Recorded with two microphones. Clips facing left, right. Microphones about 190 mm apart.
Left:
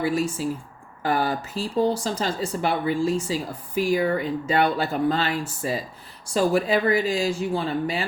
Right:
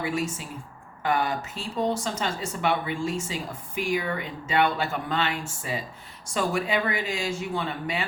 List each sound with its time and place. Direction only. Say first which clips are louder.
0.0 s speech: left 5 dB; 35° left (ahead or behind)